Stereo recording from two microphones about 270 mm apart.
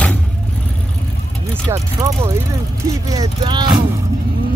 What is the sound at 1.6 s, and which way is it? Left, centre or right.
Vehicle, centre.